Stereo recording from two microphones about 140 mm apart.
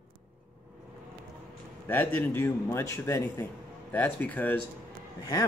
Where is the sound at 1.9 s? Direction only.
10° left (ahead or behind).